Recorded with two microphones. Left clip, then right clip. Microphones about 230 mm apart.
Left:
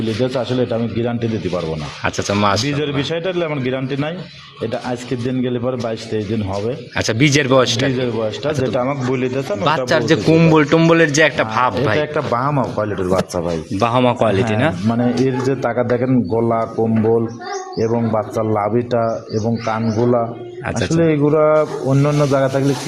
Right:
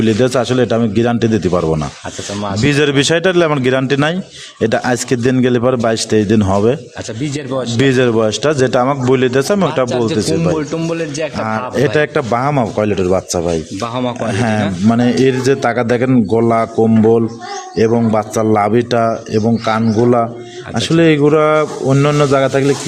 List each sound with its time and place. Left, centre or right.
0.0 s a man's voice: right
2.4 s speech: centre
2.6 s a man's voice: right
7.2 s speech: left
7.9 s a man's voice: right
9.9 s a man's voice: centre
11.9 s speech: right
13.8 s a man's voice: centre
14.8 s speech: right
17.7 s speech: right